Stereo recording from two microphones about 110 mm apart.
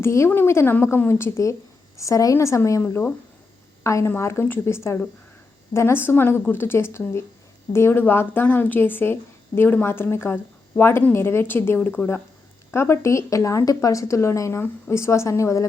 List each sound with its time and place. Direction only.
0.0 s a woman's voice: 25° left (ahead or behind)